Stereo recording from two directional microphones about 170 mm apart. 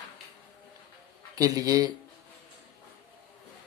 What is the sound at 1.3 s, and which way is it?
Speech, 20° right (ahead or behind).